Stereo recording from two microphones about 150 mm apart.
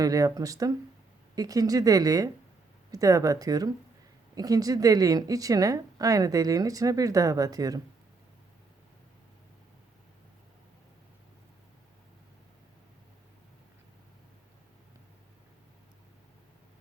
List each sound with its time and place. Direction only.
0.0 s a woman's voice: 25° right (ahead or behind)